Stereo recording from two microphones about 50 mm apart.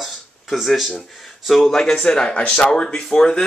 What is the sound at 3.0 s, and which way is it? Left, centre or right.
Speech, centre.